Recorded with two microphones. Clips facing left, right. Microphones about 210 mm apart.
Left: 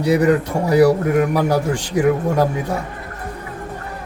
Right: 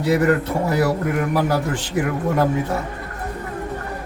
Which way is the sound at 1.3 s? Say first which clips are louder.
Left 2 dB; 15° left (ahead or behind).